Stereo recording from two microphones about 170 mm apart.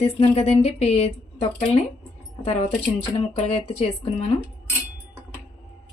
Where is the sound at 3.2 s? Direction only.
35° left (ahead or behind).